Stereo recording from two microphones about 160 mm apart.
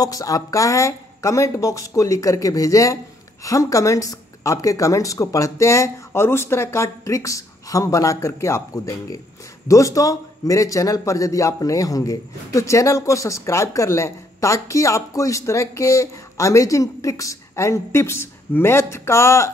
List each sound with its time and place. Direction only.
0.0 s a man's voice: 20° left (ahead or behind)